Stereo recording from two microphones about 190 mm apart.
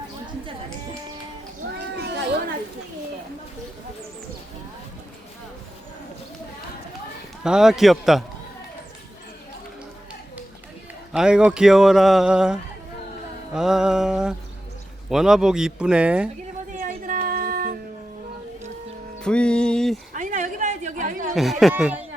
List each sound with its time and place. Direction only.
2.0 s chatter: 60° right (ahead or behind)
7.4 s a man's voice: 5° right (ahead or behind)
11.1 s a man's voice: 5° right (ahead or behind)
16.7 s a sound: 45° right (ahead or behind)
19.2 s music: 5° left (ahead or behind)
20.1 s a sound: 45° right (ahead or behind)
21.3 s a man's voice: centre (ahead or behind)